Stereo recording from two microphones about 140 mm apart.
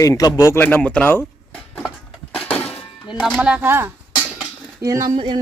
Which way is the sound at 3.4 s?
10° right (ahead or behind).